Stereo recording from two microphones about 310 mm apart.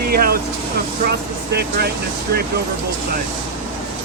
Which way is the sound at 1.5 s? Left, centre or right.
Right.